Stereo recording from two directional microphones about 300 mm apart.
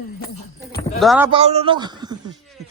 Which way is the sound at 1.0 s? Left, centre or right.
Centre.